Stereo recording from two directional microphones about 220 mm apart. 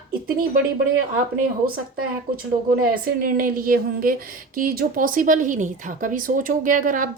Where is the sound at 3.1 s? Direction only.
40° right (ahead or behind).